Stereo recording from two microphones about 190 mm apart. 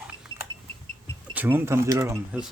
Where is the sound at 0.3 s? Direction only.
90° right.